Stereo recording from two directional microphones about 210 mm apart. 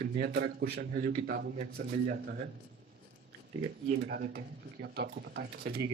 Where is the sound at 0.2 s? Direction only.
55° right (ahead or behind).